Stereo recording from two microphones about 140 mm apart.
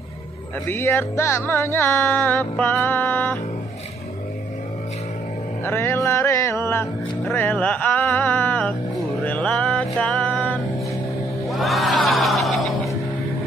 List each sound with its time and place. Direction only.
0.7 s music: 15° left (ahead or behind)
5.6 s music: 15° left (ahead or behind); by 12.9 s centre (ahead or behind)